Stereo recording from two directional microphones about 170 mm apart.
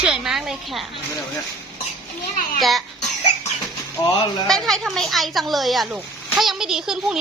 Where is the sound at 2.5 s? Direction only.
Centre (ahead or behind).